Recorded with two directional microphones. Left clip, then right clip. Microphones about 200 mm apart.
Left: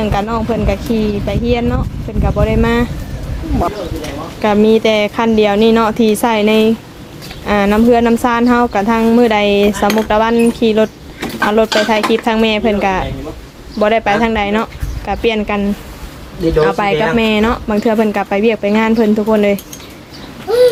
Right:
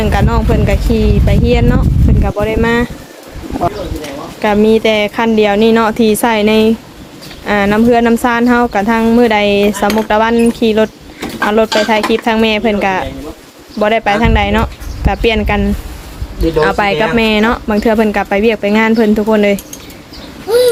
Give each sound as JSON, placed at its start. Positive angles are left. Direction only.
{"t": 0.0, "sound": "speech", "side_deg": -15}
{"t": 4.4, "sound": "speech", "side_deg": -10}